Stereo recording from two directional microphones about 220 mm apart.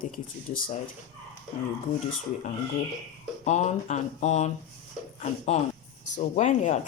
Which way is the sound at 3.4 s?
30° left (ahead or behind).